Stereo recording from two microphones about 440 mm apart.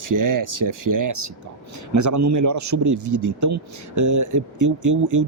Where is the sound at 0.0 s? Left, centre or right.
Right.